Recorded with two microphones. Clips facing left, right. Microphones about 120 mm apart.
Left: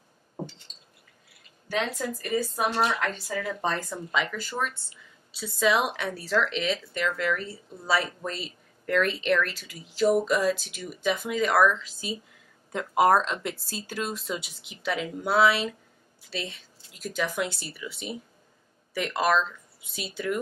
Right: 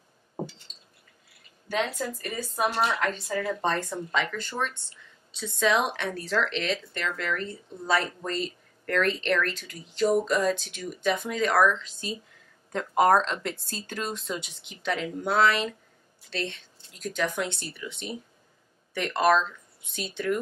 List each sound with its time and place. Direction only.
2.5 s speech: centre (ahead or behind)